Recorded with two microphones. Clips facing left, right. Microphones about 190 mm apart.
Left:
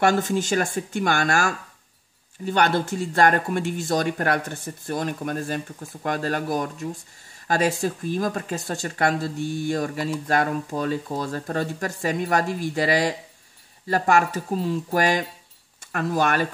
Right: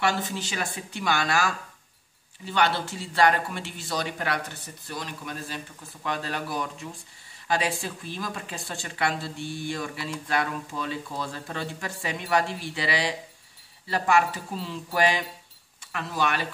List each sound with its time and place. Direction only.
0.0 s speech: 45° left (ahead or behind)